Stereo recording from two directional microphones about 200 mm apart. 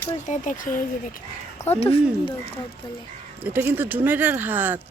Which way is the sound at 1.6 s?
30° left (ahead or behind).